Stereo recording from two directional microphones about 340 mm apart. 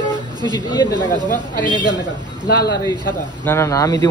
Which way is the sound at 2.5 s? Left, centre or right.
Left.